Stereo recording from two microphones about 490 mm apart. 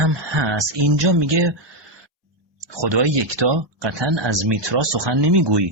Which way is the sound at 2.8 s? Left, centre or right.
Right.